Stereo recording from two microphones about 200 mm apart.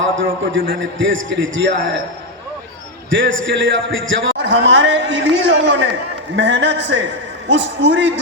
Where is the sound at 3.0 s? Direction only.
70° right (ahead or behind).